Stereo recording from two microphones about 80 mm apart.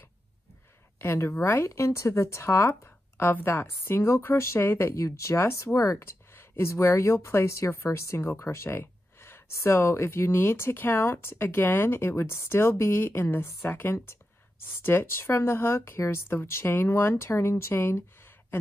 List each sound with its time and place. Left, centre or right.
0.9 s speech: left